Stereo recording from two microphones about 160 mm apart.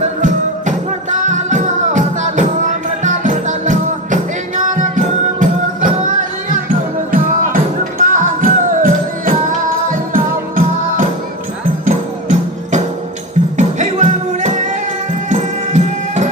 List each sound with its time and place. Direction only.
0.0 s music: 50° right (ahead or behind)